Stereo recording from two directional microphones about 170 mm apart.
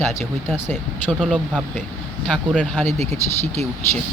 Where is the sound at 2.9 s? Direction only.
40° right (ahead or behind).